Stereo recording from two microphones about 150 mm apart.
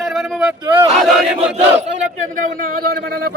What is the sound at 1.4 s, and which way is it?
Battle cry, 45° right (ahead or behind).